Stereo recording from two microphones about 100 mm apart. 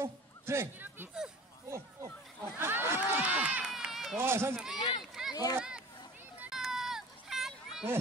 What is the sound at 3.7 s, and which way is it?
Run, centre (ahead or behind).